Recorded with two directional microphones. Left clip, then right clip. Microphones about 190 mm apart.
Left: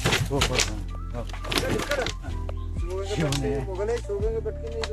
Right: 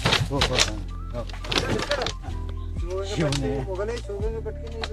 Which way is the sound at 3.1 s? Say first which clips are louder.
Right 1 dB; 5° left (ahead or behind).